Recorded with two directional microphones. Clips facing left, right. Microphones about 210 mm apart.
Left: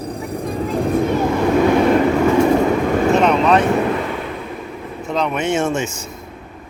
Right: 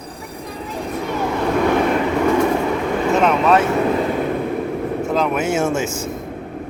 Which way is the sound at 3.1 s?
Centre (ahead or behind).